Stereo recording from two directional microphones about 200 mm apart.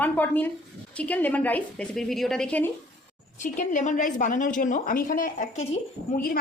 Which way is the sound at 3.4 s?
40° left (ahead or behind).